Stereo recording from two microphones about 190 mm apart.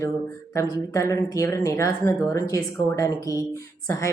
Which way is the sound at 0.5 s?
15° left (ahead or behind).